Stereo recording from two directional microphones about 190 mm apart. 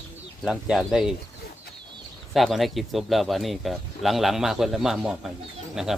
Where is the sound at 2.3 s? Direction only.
Centre (ahead or behind).